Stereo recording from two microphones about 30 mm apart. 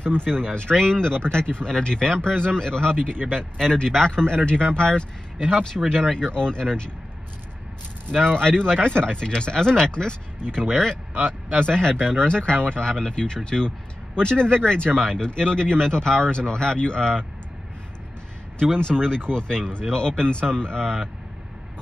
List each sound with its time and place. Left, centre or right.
0.0 s speech: left
3.3 s speech: centre
4.1 s speech: left
5.7 s speech: right
6.3 s speech: left
8.2 s speech: left
18.8 s speech: left